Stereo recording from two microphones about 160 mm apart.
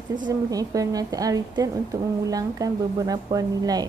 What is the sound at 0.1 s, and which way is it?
A woman's voice, 25° right (ahead or behind).